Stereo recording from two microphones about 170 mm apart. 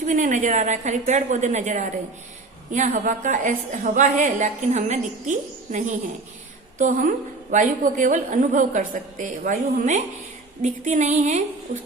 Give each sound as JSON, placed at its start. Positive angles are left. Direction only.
{"t": 0.0, "sound": "a woman's voice", "side_deg": -50}